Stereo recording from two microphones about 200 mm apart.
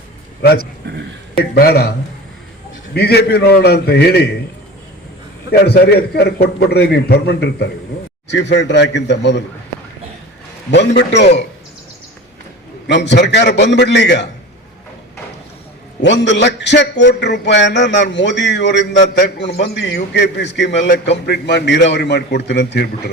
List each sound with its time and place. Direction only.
0.8 s speech: 65° right (ahead or behind)
1.5 s a man's voice: 50° left (ahead or behind)
2.9 s a man's voice: 55° left (ahead or behind)
5.5 s a man's voice: 55° left (ahead or behind)
10.7 s a man's voice: 60° left (ahead or behind)
12.9 s a man's voice: 60° left (ahead or behind)
16.0 s a man's voice: 60° left (ahead or behind)